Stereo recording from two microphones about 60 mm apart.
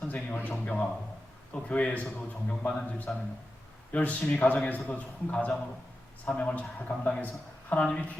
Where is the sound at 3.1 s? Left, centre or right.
Centre.